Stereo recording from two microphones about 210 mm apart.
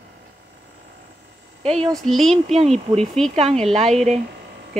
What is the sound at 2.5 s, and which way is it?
Speech, 30° right (ahead or behind).